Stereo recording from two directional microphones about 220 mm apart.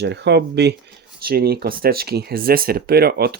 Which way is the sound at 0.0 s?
50° right (ahead or behind).